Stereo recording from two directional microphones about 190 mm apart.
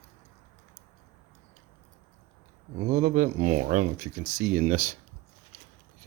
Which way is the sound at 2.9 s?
40° right (ahead or behind).